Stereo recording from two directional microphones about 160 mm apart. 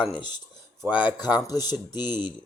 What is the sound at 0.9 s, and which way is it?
Speech, 10° right (ahead or behind).